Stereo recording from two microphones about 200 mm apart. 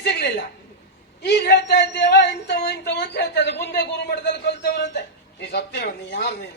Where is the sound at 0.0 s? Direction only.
55° left (ahead or behind).